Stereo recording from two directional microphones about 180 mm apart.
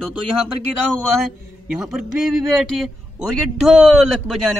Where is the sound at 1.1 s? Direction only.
Centre (ahead or behind).